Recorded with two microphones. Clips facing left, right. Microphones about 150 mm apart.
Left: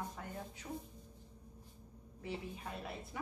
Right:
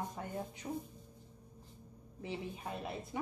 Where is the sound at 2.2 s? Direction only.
20° right (ahead or behind).